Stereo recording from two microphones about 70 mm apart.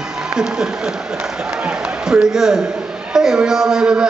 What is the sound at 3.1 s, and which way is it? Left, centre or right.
Speech, centre.